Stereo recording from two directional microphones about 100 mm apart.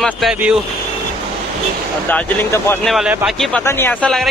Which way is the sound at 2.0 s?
15° left (ahead or behind).